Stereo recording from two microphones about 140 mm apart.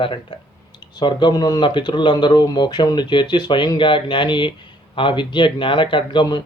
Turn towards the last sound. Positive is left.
turn(degrees=35)  # may be behind; listen again after turning